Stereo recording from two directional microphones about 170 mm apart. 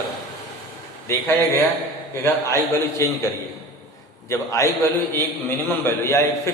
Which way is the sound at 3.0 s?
15° left (ahead or behind).